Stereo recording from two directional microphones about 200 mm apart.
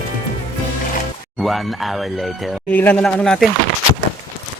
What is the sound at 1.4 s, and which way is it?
Speech, centre (ahead or behind).